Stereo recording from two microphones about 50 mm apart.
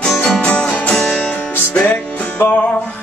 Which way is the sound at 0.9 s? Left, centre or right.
Centre.